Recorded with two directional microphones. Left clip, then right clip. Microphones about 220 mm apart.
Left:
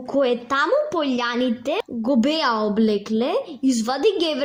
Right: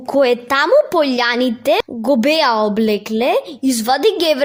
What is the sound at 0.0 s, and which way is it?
A woman's voice, 45° right (ahead or behind).